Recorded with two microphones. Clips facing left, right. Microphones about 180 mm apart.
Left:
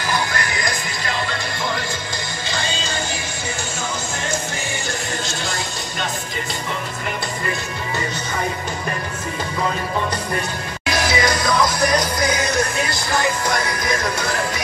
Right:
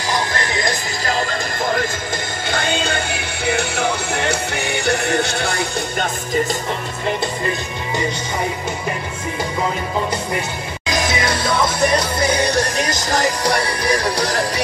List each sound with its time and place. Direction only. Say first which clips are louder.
1.0 s music: right 5 dB; 40° right (ahead or behind)
2.4 s music: right 6 dB; 55° right (ahead or behind)
10.9 s music: left 1 dB; 20° right (ahead or behind); by 14.4 s 35° right (ahead or behind)